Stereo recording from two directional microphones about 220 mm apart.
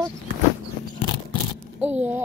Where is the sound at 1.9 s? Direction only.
10° right (ahead or behind).